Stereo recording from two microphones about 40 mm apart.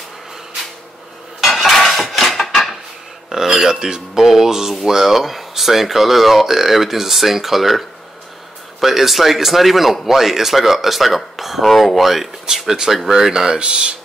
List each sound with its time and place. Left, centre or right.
1.4 s dishes: centre
3.3 s a sound: centre
3.6 s speech: centre
8.8 s speech: centre; by 13.9 s right